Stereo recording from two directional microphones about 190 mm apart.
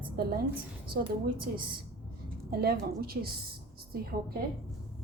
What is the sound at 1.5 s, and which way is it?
A woman's voice, 50° right (ahead or behind).